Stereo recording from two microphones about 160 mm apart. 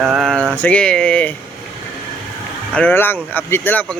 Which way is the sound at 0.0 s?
5° right (ahead or behind).